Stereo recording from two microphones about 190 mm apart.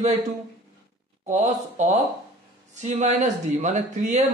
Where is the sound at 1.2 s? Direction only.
35° right (ahead or behind).